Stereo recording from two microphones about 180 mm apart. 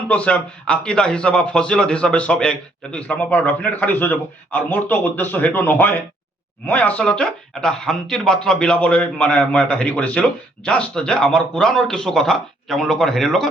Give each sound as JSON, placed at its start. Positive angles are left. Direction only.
{"t": 0.1, "sound": "a man's voice", "side_deg": 5}